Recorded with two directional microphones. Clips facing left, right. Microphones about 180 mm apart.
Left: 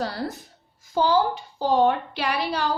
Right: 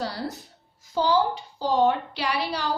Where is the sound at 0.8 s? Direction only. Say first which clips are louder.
Left 2 dB; 50° left (ahead or behind).